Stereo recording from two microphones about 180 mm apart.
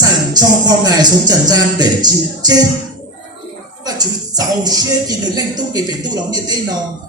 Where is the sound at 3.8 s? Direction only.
20° right (ahead or behind).